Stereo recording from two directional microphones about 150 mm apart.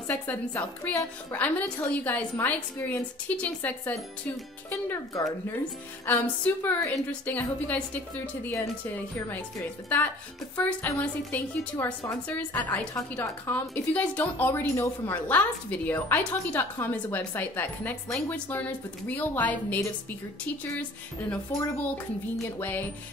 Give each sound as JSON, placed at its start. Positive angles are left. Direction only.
{"t": 0.1, "sound": "a woman's voice", "side_deg": 10}
{"t": 10.5, "sound": "a woman's voice", "side_deg": 10}
{"t": 21.5, "sound": "a woman's voice", "side_deg": 15}